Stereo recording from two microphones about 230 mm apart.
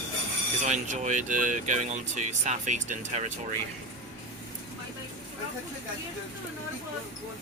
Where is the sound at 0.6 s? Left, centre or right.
Right.